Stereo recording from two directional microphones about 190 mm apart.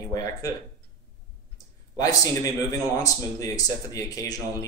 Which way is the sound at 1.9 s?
20° left (ahead or behind).